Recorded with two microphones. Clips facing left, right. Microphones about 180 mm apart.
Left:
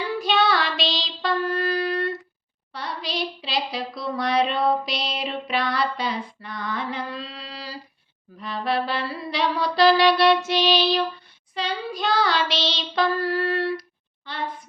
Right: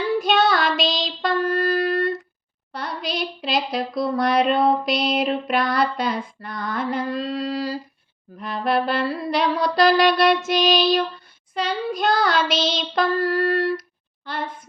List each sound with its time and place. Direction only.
0.2 s child singing: 45° right (ahead or behind)
2.7 s a sound: 50° right (ahead or behind)
8.4 s music: 50° right (ahead or behind)